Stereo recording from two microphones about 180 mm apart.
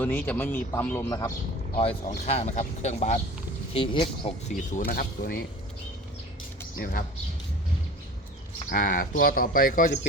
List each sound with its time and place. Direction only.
0.0 s speech: 10° left (ahead or behind)
1.7 s speech: 35° left (ahead or behind)
4.5 s speech: 50° left (ahead or behind)
6.7 s speech: 55° left (ahead or behind)
8.7 s speech: 50° left (ahead or behind)